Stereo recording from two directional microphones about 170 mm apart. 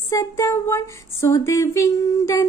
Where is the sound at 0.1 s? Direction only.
15° left (ahead or behind).